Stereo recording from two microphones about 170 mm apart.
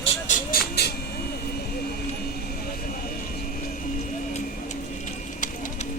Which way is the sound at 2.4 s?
60° left (ahead or behind).